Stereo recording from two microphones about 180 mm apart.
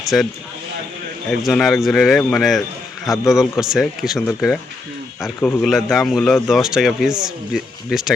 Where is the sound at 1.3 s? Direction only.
Centre (ahead or behind).